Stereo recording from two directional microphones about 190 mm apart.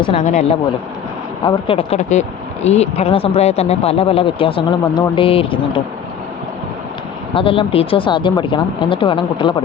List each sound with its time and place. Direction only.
0.2 s speech: 40° left (ahead or behind)
7.3 s speech: 30° left (ahead or behind)